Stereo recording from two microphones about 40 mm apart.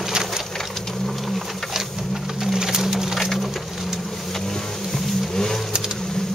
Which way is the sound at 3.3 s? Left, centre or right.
Centre.